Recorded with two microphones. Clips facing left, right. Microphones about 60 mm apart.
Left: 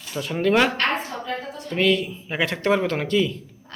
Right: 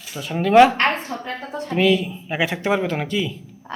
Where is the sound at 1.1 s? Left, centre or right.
Right.